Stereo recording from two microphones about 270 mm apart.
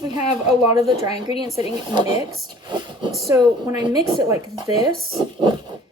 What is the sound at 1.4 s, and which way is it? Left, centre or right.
Speech, left.